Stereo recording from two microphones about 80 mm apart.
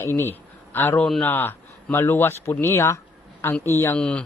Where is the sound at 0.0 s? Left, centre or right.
Left.